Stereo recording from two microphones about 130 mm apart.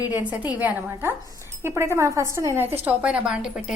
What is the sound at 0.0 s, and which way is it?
A woman's voice, 15° right (ahead or behind).